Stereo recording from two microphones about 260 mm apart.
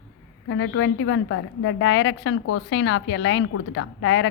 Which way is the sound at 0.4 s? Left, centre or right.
Left.